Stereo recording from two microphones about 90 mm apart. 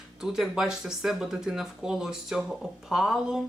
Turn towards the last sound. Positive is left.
turn(degrees=-5)  # may be behind; listen again after turning